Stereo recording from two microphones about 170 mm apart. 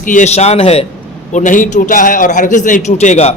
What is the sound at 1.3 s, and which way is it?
A man's voice, 50° left (ahead or behind).